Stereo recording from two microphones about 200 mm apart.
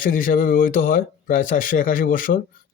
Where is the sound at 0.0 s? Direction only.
45° left (ahead or behind).